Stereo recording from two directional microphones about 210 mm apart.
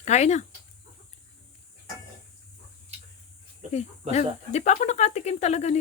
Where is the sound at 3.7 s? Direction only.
30° left (ahead or behind).